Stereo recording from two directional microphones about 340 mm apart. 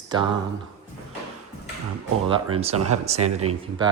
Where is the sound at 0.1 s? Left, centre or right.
Centre.